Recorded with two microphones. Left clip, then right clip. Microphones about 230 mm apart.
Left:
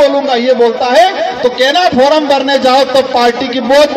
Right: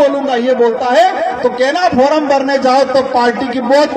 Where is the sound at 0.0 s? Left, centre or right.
Left.